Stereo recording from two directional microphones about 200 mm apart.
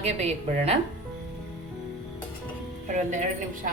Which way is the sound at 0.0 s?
35° right (ahead or behind).